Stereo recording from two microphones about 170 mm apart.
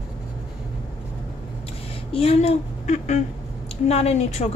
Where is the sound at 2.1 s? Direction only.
35° left (ahead or behind).